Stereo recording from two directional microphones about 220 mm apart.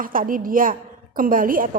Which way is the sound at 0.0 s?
40° right (ahead or behind).